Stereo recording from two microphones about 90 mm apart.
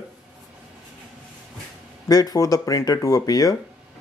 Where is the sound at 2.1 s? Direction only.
45° left (ahead or behind).